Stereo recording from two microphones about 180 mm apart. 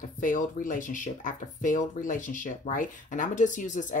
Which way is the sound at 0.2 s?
45° left (ahead or behind).